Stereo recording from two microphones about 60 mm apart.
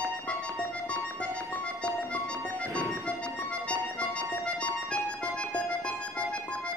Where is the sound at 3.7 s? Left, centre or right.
Centre.